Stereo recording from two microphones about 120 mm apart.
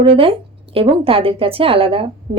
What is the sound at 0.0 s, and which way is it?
A woman's voice, 50° right (ahead or behind).